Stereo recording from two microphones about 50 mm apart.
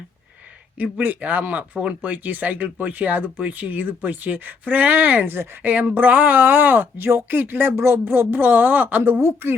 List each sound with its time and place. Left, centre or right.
0.8 s speech: right
5.2 s speech: right
5.7 s speech: right